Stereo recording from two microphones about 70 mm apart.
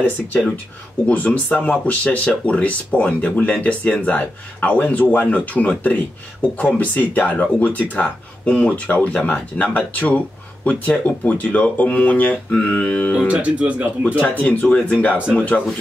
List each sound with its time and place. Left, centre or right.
1.0 s speech: centre
12.4 s music: centre
13.3 s speech: centre
14.2 s speech: left